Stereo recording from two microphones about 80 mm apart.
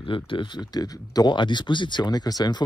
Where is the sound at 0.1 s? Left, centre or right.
Left.